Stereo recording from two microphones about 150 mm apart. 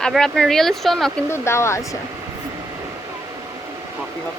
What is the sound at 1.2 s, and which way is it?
Speech, 15° left (ahead or behind).